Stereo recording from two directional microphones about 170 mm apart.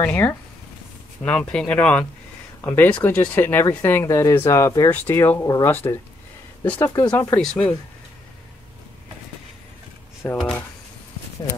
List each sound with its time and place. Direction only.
0.0 s speech: 15° left (ahead or behind)
10.3 s speech: centre (ahead or behind)